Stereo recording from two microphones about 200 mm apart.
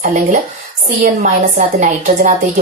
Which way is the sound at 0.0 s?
35° right (ahead or behind).